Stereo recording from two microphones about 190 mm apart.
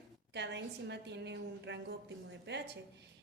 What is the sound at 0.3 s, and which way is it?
A woman's voice, 65° right (ahead or behind).